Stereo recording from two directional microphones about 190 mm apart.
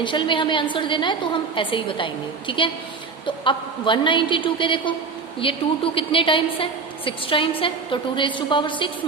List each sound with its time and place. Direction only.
0.0 s a woman's voice: 25° left (ahead or behind)